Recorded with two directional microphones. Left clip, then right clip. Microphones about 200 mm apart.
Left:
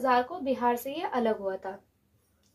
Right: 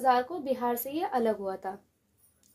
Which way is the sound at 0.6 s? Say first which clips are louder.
Left 2 dB; 45° right (ahead or behind).